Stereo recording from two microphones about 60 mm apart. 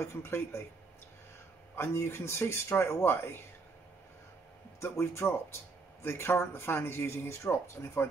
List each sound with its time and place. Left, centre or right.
0.0 s speech: left
1.8 s speech: left
4.7 s speech: left